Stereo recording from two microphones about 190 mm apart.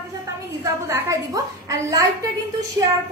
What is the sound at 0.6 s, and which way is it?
A woman's voice, 15° right (ahead or behind).